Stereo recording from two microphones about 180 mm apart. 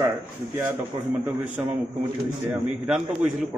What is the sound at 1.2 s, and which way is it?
A man's voice, 10° right (ahead or behind).